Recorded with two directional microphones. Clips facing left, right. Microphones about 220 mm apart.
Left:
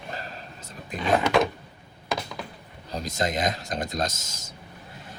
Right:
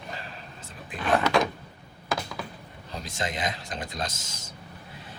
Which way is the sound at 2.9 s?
40° left (ahead or behind).